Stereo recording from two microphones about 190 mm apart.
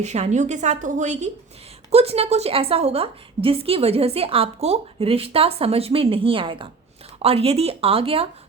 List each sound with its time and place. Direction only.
0.0 s a woman's voice: 35° right (ahead or behind)